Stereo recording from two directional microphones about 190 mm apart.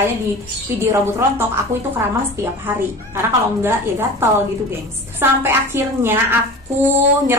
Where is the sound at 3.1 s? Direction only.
10° right (ahead or behind).